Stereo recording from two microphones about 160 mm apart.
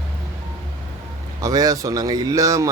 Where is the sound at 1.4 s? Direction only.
20° right (ahead or behind).